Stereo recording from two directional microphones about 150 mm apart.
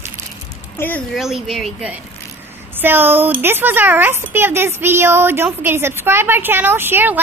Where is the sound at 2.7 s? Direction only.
15° right (ahead or behind).